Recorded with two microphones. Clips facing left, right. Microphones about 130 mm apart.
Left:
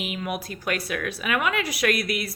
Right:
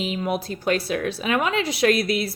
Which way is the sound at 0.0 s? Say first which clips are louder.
Right 5 dB; 30° right (ahead or behind).